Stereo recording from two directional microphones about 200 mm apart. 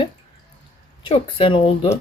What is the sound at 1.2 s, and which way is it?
Speech, 25° left (ahead or behind).